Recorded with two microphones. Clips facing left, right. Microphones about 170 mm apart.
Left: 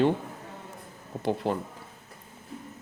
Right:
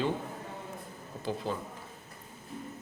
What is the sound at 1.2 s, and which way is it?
Speech, 65° left (ahead or behind).